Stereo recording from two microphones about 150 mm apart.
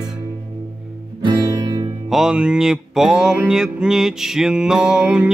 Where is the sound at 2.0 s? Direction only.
5° right (ahead or behind).